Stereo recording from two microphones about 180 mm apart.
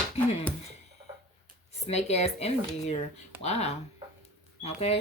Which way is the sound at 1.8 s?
35° left (ahead or behind).